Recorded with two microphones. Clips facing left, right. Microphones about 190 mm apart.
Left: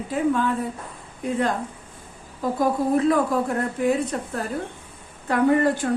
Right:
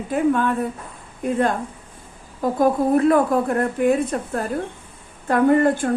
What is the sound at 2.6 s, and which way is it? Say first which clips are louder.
A woman's voice: right 4 dB; 55° right (ahead or behind).